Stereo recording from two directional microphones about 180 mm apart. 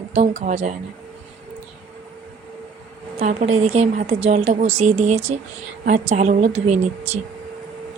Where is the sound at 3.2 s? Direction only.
40° right (ahead or behind).